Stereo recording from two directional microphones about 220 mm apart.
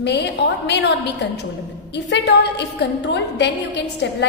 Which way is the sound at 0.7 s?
50° left (ahead or behind).